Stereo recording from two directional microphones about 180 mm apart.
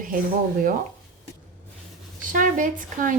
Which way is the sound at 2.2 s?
45° right (ahead or behind).